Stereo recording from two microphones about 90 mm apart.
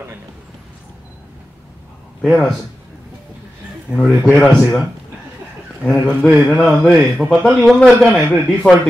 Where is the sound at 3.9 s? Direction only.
10° right (ahead or behind).